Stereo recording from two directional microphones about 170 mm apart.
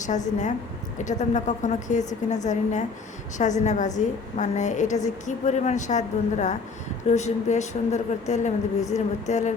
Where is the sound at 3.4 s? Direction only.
45° left (ahead or behind).